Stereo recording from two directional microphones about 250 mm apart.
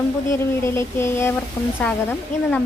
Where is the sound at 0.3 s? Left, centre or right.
Centre.